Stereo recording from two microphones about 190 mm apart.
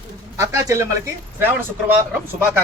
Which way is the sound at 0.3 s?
15° right (ahead or behind).